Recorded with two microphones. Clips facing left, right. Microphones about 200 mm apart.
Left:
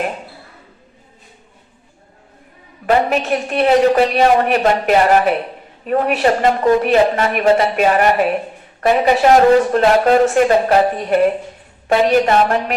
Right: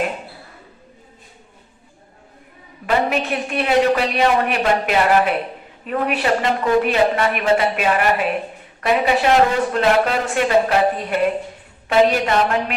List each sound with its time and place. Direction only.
2.8 s a man's voice: 45° left (ahead or behind)